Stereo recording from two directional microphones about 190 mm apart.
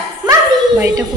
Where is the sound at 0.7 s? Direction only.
15° right (ahead or behind).